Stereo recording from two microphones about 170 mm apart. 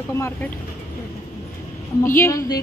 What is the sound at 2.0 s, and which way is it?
Speech, 15° left (ahead or behind).